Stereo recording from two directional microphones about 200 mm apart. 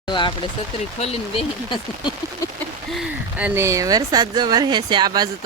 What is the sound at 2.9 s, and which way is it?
Speech, 5° right (ahead or behind).